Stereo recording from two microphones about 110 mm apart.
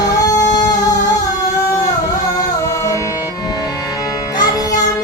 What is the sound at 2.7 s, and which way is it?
Music, 25° left (ahead or behind).